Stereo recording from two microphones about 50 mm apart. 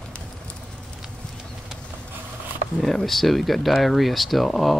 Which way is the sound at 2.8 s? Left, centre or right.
Centre.